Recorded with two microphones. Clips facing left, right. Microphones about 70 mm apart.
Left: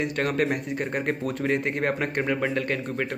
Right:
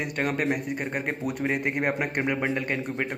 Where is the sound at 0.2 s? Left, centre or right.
Centre.